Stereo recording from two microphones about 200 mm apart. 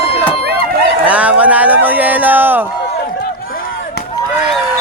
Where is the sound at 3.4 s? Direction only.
50° left (ahead or behind).